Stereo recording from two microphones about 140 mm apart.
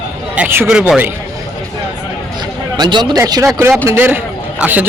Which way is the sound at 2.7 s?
35° right (ahead or behind).